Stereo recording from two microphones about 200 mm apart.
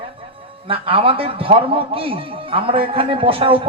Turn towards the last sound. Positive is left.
turn(degrees=-25)  # may be behind; listen again after turning